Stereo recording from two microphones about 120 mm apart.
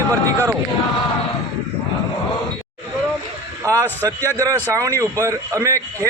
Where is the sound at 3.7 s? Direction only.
15° left (ahead or behind).